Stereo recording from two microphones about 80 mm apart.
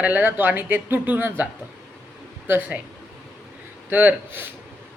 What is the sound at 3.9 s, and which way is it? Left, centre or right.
Speech, right.